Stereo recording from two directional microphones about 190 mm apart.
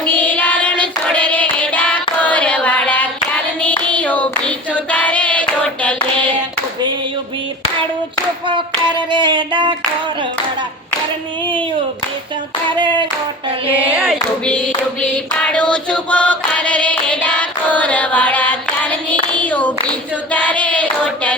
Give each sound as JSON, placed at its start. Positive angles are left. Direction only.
{"t": 0.0, "sound": "child singing", "side_deg": 10}
{"t": 2.2, "sound": "carnatic music", "side_deg": 5}
{"t": 3.6, "sound": "singing", "side_deg": 10}
{"t": 8.4, "sound": "hands", "side_deg": -25}
{"t": 13.7, "sound": "a sound", "side_deg": -5}
{"t": 15.4, "sound": "choir", "side_deg": 5}
{"t": 19.4, "sound": "a sound", "side_deg": 10}
{"t": 20.3, "sound": "hands", "side_deg": 10}